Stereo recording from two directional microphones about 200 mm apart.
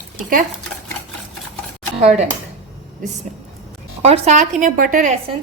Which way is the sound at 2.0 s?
35° right (ahead or behind).